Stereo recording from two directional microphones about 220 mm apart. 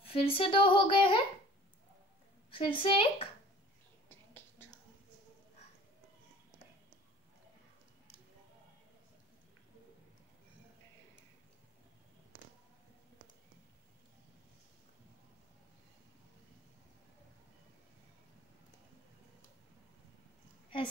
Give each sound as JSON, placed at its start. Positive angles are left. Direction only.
{"t": 0.0, "sound": "speech", "side_deg": 25}
{"t": 2.5, "sound": "speech", "side_deg": 20}
{"t": 4.1, "sound": "whispering", "side_deg": 10}